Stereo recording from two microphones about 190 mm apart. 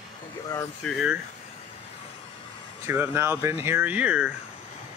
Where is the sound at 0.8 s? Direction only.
5° right (ahead or behind).